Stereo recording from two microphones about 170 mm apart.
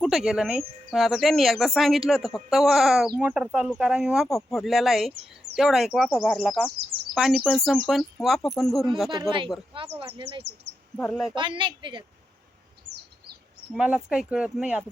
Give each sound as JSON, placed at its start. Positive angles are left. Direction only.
{"t": 0.0, "sound": "speech", "side_deg": 0}
{"t": 10.0, "sound": "speech", "side_deg": -30}
{"t": 10.9, "sound": "speech", "side_deg": 10}
{"t": 11.3, "sound": "speech", "side_deg": -30}
{"t": 13.7, "sound": "speech", "side_deg": -5}